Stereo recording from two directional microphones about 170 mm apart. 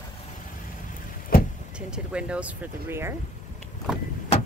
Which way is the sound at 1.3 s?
60° left (ahead or behind).